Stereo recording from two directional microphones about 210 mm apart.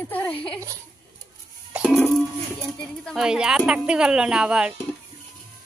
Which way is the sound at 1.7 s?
Centre (ahead or behind).